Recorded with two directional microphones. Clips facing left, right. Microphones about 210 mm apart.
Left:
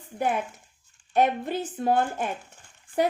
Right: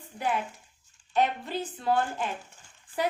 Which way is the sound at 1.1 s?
50° left (ahead or behind).